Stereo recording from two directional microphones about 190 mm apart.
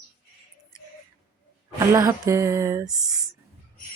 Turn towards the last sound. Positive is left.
turn(degrees=-20)  # may be behind; listen again after turning